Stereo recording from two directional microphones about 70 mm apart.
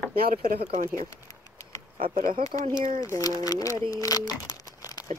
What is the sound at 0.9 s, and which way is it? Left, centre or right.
Speech, left.